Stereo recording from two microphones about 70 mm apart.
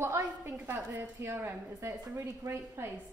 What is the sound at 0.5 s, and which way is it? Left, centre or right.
A woman's voice, right.